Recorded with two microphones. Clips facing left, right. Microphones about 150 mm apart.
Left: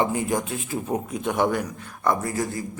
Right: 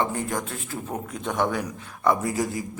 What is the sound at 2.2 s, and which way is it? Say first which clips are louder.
Speech: right 1 dB; 15° right (ahead or behind).